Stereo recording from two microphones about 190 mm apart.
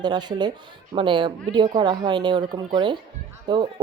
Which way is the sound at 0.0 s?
20° right (ahead or behind).